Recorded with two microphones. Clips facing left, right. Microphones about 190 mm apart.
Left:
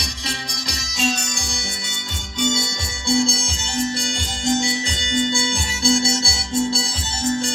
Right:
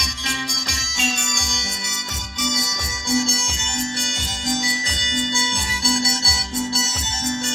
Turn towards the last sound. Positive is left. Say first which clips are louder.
# left 4 dB
turn(degrees=30)  # may be behind; listen again after turning